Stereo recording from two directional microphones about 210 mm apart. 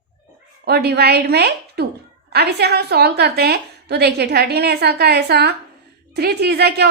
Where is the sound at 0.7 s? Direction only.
50° right (ahead or behind).